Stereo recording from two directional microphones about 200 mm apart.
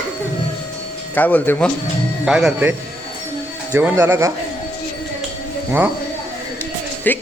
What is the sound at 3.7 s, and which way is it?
Speech, 10° right (ahead or behind).